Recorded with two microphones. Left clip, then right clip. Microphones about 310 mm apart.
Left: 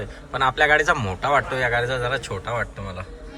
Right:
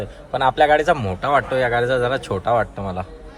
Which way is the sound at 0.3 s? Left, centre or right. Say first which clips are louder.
Right 3 dB; centre.